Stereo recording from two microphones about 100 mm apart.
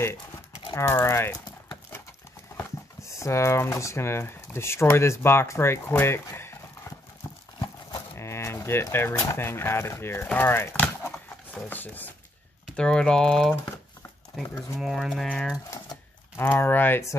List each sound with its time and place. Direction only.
0.7 s speech: 25° left (ahead or behind)
2.5 s speech: 30° left (ahead or behind)
8.1 s a sound: 25° left (ahead or behind)
8.9 s speech: 20° left (ahead or behind)
12.7 s speech: 10° left (ahead or behind)
16.3 s speech: 20° left (ahead or behind)